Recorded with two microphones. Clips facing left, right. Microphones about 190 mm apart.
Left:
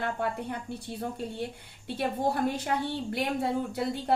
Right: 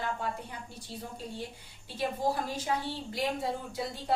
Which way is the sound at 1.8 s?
60° left (ahead or behind).